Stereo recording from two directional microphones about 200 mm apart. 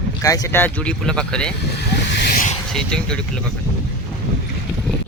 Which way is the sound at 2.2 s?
45° left (ahead or behind).